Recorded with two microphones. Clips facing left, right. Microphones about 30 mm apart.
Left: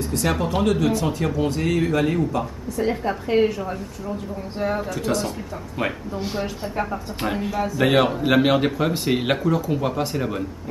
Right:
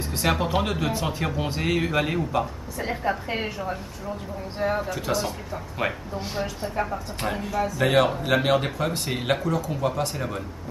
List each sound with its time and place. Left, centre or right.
0.0 s speech: right
2.8 s a woman's voice: centre